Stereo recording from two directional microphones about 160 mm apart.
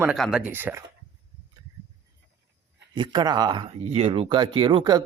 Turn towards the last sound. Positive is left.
turn(degrees=-30)  # may be behind; listen again after turning